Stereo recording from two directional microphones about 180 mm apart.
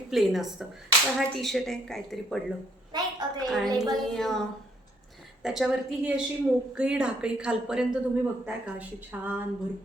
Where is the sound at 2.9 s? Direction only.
25° right (ahead or behind).